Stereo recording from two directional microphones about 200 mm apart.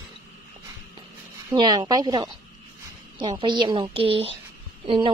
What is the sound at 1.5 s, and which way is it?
Speech, 20° right (ahead or behind).